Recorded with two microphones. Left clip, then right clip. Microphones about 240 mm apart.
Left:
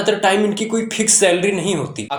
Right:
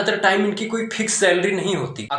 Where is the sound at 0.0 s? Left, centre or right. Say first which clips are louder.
Left 2 dB; left.